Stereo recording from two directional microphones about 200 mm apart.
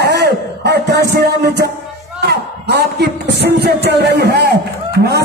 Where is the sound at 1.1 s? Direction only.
55° right (ahead or behind).